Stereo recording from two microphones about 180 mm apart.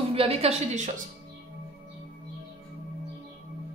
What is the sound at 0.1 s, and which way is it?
Speech, 35° right (ahead or behind).